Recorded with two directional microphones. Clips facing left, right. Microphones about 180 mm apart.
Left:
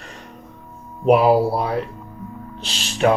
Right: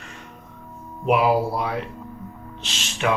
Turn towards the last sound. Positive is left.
turn(degrees=35)  # may be behind; listen again after turning